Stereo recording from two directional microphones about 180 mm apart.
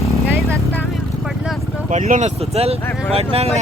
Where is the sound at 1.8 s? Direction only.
40° right (ahead or behind).